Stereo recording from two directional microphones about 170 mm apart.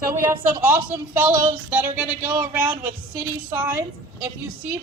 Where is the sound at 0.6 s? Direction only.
10° right (ahead or behind).